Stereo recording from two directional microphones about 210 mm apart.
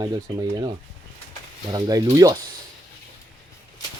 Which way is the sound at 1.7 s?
15° right (ahead or behind).